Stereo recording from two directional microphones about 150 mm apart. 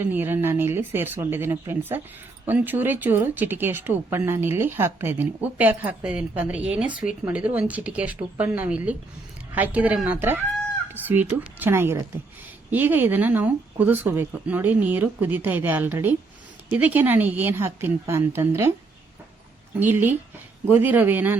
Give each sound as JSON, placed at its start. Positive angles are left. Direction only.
{"t": 0.0, "sound": "speech", "side_deg": -15}
{"t": 19.8, "sound": "speech", "side_deg": -15}